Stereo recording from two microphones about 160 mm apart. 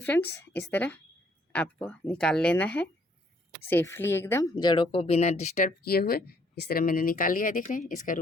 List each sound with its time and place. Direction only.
0.0 s speech: 10° left (ahead or behind); by 5.7 s 45° left (ahead or behind)
5.8 s speech: 75° left (ahead or behind); by 8.2 s 55° left (ahead or behind)